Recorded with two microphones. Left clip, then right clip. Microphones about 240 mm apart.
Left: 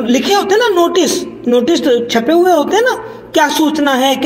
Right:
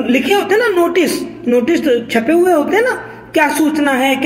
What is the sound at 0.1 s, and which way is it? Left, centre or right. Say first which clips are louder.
A woman's voice: left 1 dB; centre.